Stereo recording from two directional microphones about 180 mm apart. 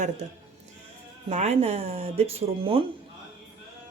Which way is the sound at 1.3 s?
40° right (ahead or behind).